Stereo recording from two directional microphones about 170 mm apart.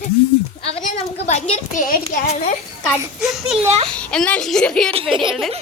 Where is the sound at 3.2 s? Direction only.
Centre (ahead or behind).